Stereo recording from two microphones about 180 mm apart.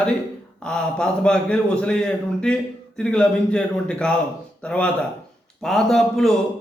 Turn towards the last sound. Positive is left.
turn(degrees=0)  # may be behind; listen again after turning